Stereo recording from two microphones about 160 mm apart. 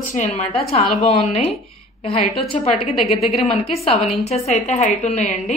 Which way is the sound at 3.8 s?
40° left (ahead or behind).